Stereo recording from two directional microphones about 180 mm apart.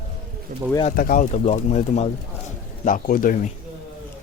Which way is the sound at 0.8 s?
50° left (ahead or behind).